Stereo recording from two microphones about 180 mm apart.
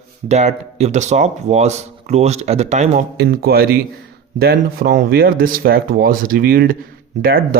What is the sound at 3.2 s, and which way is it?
Speech, 60° right (ahead or behind).